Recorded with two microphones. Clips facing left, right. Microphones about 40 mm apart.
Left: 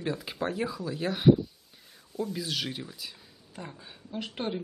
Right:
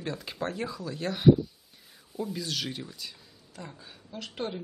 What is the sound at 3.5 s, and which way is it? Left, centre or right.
Speech, left.